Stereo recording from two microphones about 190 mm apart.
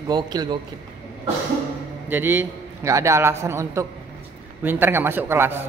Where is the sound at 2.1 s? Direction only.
10° right (ahead or behind).